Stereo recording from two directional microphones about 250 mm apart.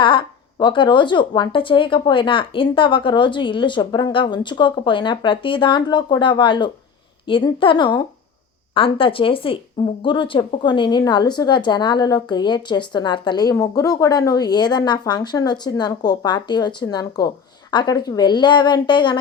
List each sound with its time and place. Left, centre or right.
0.0 s a woman's voice: centre